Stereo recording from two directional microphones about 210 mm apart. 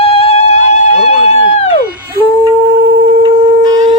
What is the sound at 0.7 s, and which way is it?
Music, 30° left (ahead or behind).